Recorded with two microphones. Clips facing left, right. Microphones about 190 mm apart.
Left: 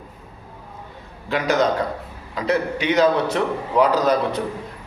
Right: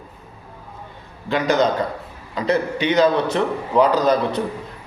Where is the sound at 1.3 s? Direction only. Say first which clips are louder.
Right 1 dB; 5° left (ahead or behind).